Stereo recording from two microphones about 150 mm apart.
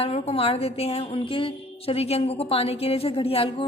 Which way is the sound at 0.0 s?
40° left (ahead or behind).